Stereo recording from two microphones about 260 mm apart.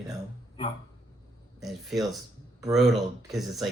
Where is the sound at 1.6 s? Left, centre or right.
Centre.